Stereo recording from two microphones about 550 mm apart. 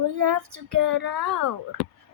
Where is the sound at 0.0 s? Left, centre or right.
Right.